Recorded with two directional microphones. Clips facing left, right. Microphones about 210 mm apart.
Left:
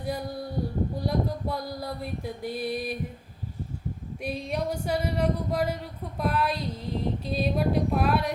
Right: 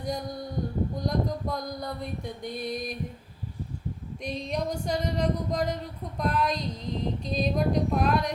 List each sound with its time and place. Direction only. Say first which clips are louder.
0.0 s a sound: left 1 dB; 5° left (ahead or behind)
0.9 s female singing: left 1 dB; 5° left (ahead or behind)
4.2 s speech: left 1 dB; 5° left (ahead or behind)
6.1 s female singing: even; 5° left (ahead or behind)